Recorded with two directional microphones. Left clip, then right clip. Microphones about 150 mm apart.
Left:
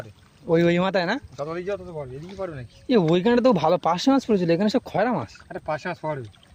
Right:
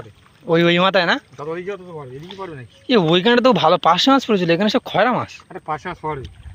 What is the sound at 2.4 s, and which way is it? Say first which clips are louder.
Speech: left 1 dB; 60° left (ahead or behind).